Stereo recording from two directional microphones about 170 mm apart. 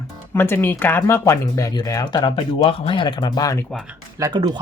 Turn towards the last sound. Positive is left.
turn(degrees=-20)  # may be behind; listen again after turning